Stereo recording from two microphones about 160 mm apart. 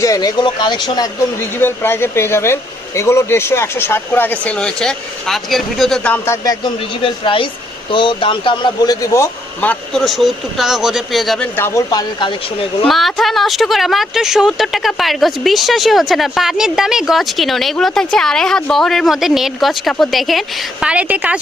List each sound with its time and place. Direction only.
0.0 s speech: 20° left (ahead or behind); by 6.1 s centre (ahead or behind)
6.2 s speech: 20° left (ahead or behind); by 11.4 s centre (ahead or behind)
11.5 s speech: 15° left (ahead or behind)
12.9 s a woman's voice: centre (ahead or behind)